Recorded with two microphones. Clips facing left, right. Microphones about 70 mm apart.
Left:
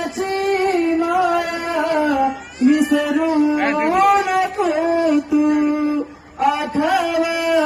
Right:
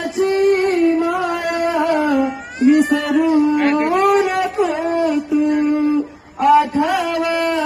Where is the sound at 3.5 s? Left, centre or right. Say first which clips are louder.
Right 1 dB; centre.